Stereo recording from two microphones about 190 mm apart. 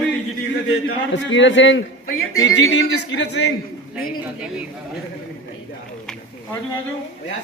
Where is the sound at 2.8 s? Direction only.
65° left (ahead or behind).